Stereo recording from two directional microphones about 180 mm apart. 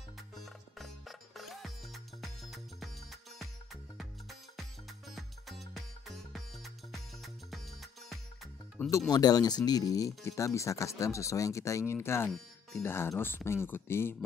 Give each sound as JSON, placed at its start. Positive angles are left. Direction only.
{"t": 0.7, "sound": "music", "side_deg": 0}
{"t": 8.8, "sound": "speech", "side_deg": 10}
{"t": 9.1, "sound": "speech", "side_deg": 20}